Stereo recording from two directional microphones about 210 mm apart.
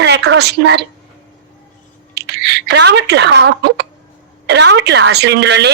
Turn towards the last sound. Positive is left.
turn(degrees=-55)  # may be behind; listen again after turning